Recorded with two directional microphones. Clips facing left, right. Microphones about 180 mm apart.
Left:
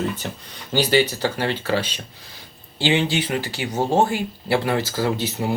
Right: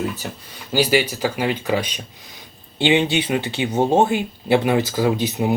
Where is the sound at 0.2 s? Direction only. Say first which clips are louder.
Right 1 dB; 5° right (ahead or behind).